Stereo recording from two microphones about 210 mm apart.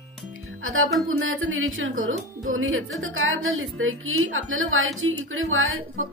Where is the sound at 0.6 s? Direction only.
75° right (ahead or behind).